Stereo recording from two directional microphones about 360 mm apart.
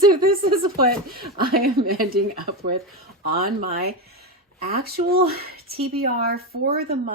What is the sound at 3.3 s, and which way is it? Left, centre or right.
Speech, right.